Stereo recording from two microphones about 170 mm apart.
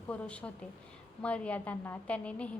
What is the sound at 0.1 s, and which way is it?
A woman's voice, 5° left (ahead or behind).